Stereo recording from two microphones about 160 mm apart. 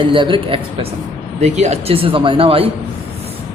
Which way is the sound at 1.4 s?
45° right (ahead or behind).